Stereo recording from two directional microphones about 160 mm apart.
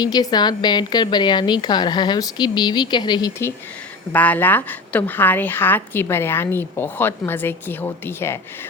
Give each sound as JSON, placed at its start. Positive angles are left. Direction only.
{"t": 0.0, "sound": "a woman's voice", "side_deg": 25}
{"t": 4.1, "sound": "a woman's voice", "side_deg": 10}